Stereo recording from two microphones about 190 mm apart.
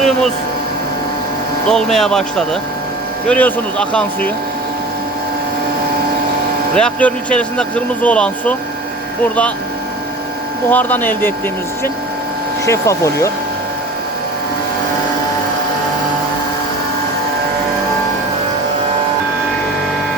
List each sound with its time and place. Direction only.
1.7 s speech: centre (ahead or behind)
6.7 s speech: 5° left (ahead or behind)
10.7 s speech: 10° left (ahead or behind)
12.6 s speech: 15° left (ahead or behind)